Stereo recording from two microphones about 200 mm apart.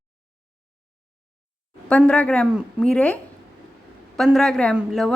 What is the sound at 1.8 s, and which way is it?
A woman's voice, 5° left (ahead or behind).